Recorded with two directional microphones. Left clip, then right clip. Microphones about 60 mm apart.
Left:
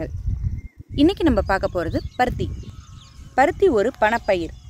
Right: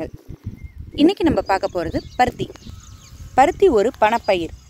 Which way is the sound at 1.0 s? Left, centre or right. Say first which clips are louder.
Right 2 dB; right.